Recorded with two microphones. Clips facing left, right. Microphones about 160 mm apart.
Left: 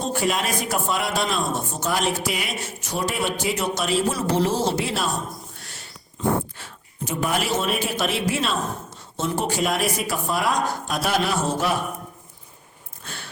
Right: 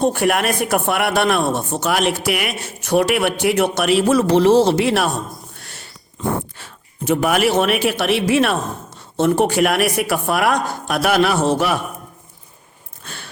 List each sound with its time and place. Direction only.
0.0 s speech: 65° right (ahead or behind)
5.5 s a sound: 60° right (ahead or behind)
6.6 s speech: 70° right (ahead or behind)